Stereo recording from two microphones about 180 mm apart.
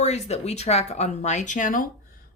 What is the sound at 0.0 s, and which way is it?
Speech, 40° left (ahead or behind).